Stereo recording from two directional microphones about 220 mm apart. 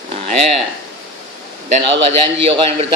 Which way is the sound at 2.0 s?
25° right (ahead or behind).